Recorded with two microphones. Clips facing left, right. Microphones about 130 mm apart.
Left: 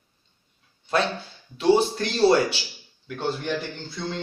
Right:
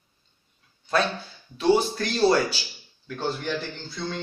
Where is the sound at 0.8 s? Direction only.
25° left (ahead or behind).